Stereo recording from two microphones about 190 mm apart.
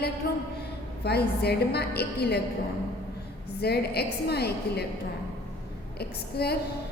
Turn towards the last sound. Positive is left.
turn(degrees=55)  # may be behind; listen again after turning